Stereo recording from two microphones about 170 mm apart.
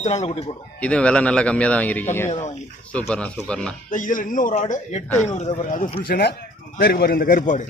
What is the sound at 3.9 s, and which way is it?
A man's voice, 50° left (ahead or behind).